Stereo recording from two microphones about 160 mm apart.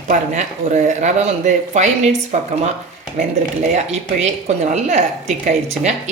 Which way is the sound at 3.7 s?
50° right (ahead or behind).